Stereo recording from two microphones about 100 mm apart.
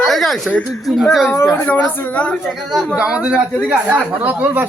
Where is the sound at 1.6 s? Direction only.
15° left (ahead or behind).